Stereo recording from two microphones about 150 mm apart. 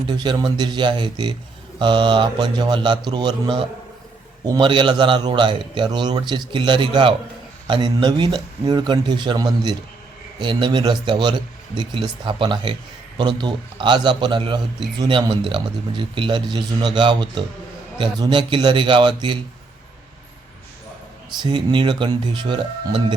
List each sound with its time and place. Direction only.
0.1 s a man's voice: 30° right (ahead or behind)
21.2 s a man's voice: 30° right (ahead or behind)